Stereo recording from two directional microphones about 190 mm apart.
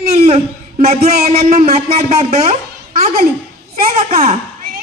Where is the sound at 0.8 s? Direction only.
50° right (ahead or behind).